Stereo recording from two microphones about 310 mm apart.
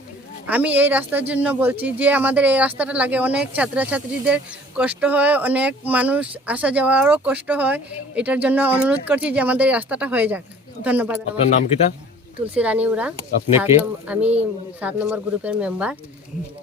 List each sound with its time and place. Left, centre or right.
0.4 s speech: centre
11.3 s speech: left
12.5 s speech: centre